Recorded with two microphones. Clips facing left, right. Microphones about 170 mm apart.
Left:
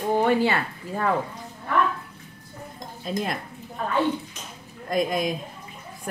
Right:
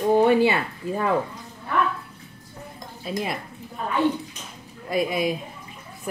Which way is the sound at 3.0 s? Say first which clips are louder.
Even; 5° right (ahead or behind).